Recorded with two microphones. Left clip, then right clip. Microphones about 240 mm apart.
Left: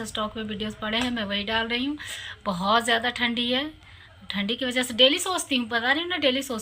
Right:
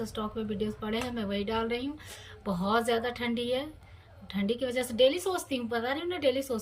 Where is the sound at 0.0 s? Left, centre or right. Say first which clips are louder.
Left 5 dB; centre.